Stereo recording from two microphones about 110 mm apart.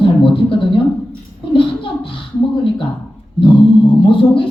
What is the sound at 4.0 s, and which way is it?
Speech, 50° left (ahead or behind).